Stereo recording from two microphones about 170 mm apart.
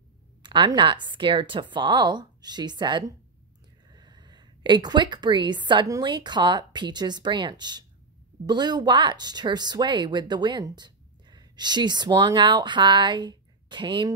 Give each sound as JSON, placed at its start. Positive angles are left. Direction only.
{"t": 0.4, "sound": "a woman's voice", "side_deg": -25}